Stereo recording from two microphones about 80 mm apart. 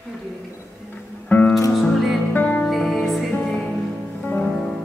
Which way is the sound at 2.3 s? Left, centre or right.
Left.